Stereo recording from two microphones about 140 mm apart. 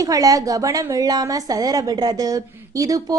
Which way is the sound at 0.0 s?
25° right (ahead or behind).